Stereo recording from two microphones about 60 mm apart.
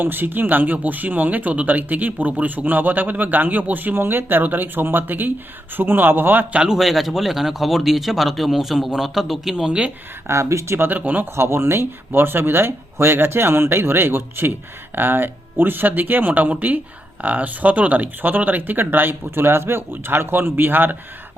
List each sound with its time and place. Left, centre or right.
0.0 s speech: right
6.5 s speech: centre
10.2 s speech: right
10.8 s speech: right
11.3 s speech: right